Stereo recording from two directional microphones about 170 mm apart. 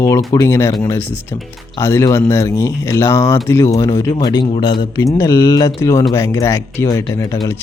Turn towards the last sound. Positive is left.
turn(degrees=15)  # may be behind; listen again after turning